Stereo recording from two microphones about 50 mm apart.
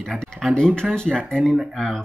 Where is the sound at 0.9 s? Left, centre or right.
Centre.